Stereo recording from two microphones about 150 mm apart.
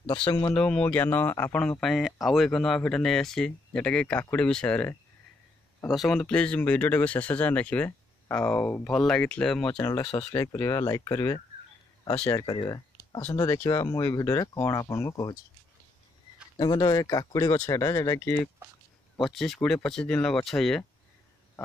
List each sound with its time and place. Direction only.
0.0 s speech: 30° left (ahead or behind)
0.6 s speech: 10° left (ahead or behind)
9.7 s speech: 25° left (ahead or behind)
16.5 s speech: 25° left (ahead or behind)
19.2 s speech: centre (ahead or behind)